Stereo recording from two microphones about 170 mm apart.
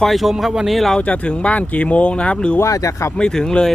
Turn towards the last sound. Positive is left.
turn(degrees=5)  # may be behind; listen again after turning